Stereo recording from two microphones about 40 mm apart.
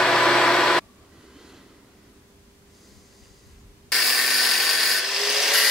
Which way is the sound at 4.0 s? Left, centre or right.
Centre.